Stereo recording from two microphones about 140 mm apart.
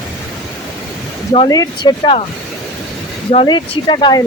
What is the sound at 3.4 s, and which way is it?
Speech, 35° left (ahead or behind).